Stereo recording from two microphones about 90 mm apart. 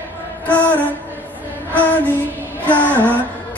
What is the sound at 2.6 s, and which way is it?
Female singing, 15° left (ahead or behind).